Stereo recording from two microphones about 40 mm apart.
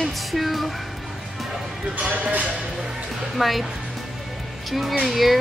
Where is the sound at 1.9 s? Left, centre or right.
Right.